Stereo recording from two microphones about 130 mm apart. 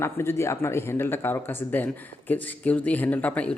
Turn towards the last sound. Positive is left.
turn(degrees=10)  # may be behind; listen again after turning